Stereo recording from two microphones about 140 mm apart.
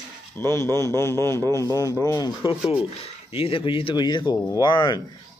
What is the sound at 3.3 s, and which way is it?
Speech, 40° left (ahead or behind).